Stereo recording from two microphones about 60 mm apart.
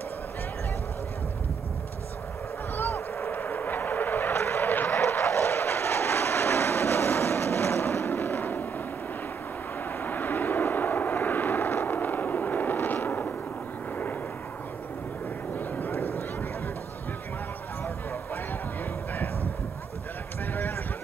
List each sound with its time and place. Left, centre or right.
2.7 s vehicle: left
9.9 s vehicle: left
15.5 s a sound: left